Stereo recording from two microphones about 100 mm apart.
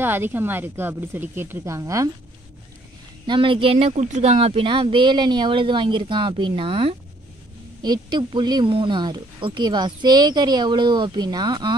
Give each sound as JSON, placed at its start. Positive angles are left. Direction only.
{"t": 0.0, "sound": "speech", "side_deg": -20}
{"t": 3.3, "sound": "speech", "side_deg": -60}
{"t": 7.8, "sound": "speech", "side_deg": -50}
{"t": 8.6, "sound": "speech", "side_deg": -60}